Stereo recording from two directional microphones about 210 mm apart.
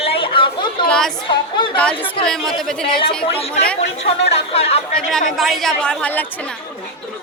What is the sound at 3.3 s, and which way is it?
Speech, 30° left (ahead or behind).